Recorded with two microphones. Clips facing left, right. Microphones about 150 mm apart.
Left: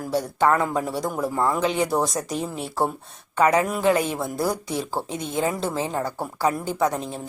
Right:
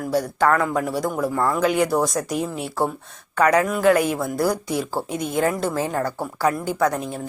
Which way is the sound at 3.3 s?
20° left (ahead or behind).